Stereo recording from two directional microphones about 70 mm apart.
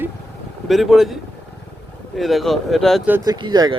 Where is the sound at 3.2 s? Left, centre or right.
Right.